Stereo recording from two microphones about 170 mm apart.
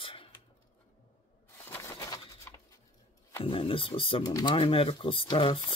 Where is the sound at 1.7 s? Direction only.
20° left (ahead or behind).